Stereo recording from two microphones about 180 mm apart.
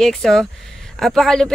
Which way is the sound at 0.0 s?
Centre (ahead or behind).